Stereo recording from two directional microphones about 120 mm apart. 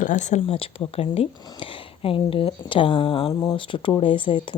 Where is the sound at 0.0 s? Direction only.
90° left.